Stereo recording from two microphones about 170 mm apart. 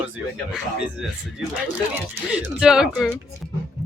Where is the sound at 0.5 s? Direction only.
5° right (ahead or behind).